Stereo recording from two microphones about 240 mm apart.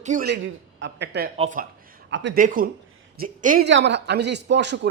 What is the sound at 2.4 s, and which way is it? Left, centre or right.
Speech, right.